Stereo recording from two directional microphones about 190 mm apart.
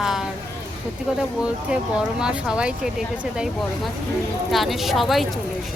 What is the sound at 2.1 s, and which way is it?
Speech, 5° right (ahead or behind).